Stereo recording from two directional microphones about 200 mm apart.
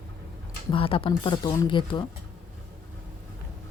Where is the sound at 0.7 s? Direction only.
25° left (ahead or behind).